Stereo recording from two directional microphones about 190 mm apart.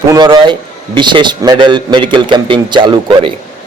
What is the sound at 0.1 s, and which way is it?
A man's voice, 20° right (ahead or behind).